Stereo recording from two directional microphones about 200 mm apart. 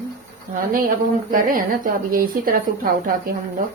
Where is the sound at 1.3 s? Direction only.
45° right (ahead or behind).